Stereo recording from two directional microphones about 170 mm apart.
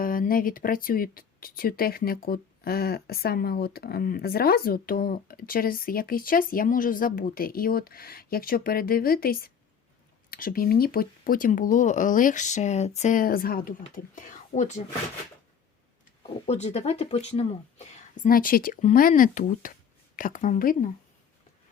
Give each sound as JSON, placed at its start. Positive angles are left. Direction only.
{"t": 0.0, "sound": "speech", "side_deg": 55}
{"t": 16.2, "sound": "speech", "side_deg": 40}